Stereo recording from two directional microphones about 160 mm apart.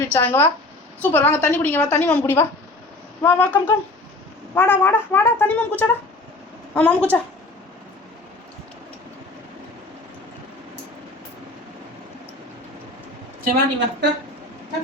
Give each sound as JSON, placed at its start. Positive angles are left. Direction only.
{"t": 0.1, "sound": "a woman's voice", "side_deg": 10}
{"t": 13.4, "sound": "a woman's voice", "side_deg": -90}